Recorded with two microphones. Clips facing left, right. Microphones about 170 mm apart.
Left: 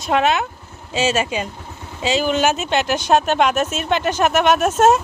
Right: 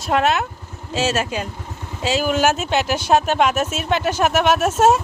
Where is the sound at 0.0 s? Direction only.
Centre (ahead or behind).